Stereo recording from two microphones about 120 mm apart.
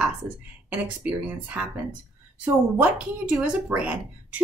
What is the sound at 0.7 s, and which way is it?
Speech, 15° right (ahead or behind).